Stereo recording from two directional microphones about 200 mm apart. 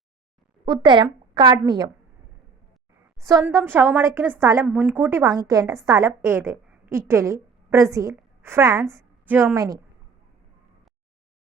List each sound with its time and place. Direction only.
0.6 s a woman's voice: 20° right (ahead or behind)
3.2 s a woman's voice: 15° right (ahead or behind)